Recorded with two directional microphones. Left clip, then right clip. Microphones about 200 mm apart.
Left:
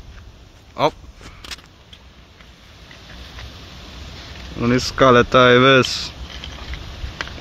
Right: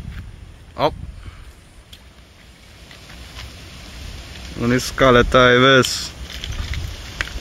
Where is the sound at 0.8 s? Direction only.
5° left (ahead or behind).